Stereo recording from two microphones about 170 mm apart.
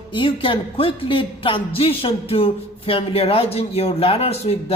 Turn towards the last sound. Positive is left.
turn(degrees=40)  # may be behind; listen again after turning